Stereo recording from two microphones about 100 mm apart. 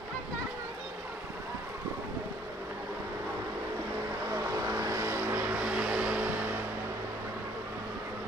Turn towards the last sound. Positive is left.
turn(degrees=-15)  # may be behind; listen again after turning